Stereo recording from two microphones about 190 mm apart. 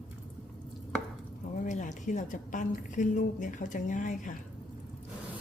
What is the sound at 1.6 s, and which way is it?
A woman's voice, 40° left (ahead or behind).